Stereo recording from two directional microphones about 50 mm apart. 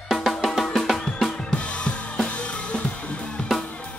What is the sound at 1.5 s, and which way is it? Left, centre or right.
Drum kit, left.